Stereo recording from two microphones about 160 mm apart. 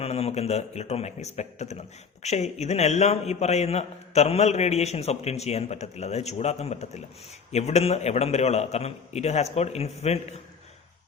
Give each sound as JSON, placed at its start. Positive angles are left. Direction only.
{"t": 0.0, "sound": "a man's voice", "side_deg": 40}